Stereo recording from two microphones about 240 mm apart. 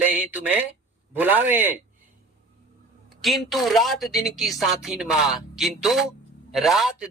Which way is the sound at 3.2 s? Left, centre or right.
Centre.